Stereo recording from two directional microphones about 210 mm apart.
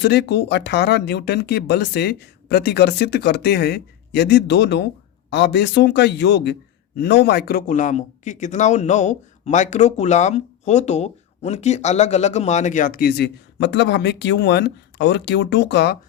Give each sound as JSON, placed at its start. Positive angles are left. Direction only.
{"t": 0.0, "sound": "a man's voice", "side_deg": 50}